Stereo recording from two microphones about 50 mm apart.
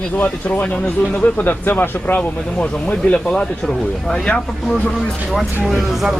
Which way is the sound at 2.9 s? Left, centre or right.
Left.